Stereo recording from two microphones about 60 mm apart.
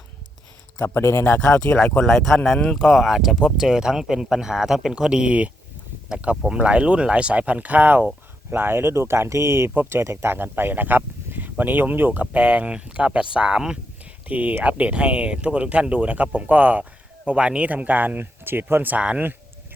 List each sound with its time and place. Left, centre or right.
1.0 s speech: left
1.4 s speech: centre
2.8 s speech: centre
6.5 s speech: centre
8.4 s speech: right
10.3 s speech: right; by 13.7 s centre
14.0 s speech: right